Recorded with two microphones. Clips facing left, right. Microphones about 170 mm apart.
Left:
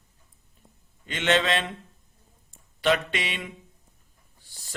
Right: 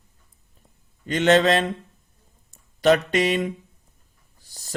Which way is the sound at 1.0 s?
40° right (ahead or behind).